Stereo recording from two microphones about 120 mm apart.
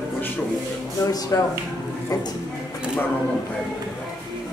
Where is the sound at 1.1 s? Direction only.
30° left (ahead or behind).